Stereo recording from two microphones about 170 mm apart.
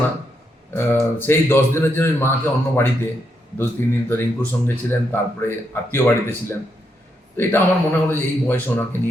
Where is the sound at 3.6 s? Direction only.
10° left (ahead or behind).